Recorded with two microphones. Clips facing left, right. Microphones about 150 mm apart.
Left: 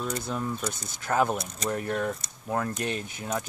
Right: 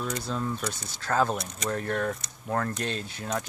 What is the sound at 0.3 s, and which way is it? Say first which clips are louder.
Speech: even; 10° left (ahead or behind).